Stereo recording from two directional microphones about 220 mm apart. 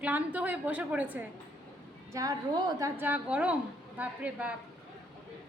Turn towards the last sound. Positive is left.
turn(degrees=-5)  # may be behind; listen again after turning